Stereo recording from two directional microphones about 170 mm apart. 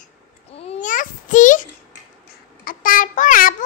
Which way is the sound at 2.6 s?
55° left (ahead or behind).